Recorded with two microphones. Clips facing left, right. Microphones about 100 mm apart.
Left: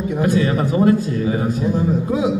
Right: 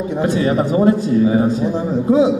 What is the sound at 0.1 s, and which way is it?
A man's voice, 25° right (ahead or behind).